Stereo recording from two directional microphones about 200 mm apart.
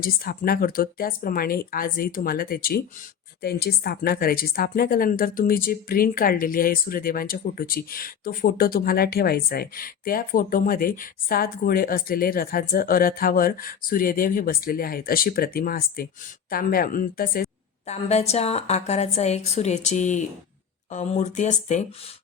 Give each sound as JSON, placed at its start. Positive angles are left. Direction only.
{"t": 0.0, "sound": "a woman's voice", "side_deg": 45}
{"t": 17.8, "sound": "a woman's voice", "side_deg": 35}